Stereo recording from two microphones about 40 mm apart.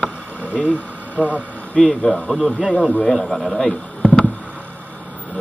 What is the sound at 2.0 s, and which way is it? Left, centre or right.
Speech, centre.